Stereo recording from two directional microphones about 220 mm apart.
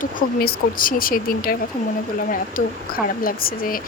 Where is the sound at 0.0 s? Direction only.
40° left (ahead or behind).